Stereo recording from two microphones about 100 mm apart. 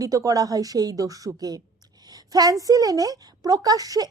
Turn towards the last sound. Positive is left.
turn(degrees=-40)  # may be behind; listen again after turning